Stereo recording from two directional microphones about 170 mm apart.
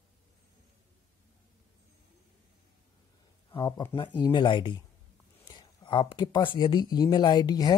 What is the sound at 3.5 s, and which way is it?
Speech, 25° left (ahead or behind).